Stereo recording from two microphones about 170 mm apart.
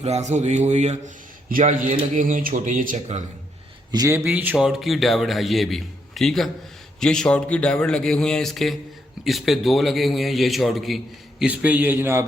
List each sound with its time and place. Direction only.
0.0 s a man's voice: 40° right (ahead or behind)
3.9 s a man's voice: 20° right (ahead or behind)